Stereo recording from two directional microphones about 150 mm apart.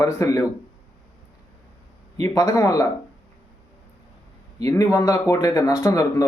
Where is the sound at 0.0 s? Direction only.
20° left (ahead or behind).